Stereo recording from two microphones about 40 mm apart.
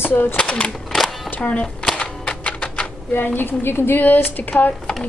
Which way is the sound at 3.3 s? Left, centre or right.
Left.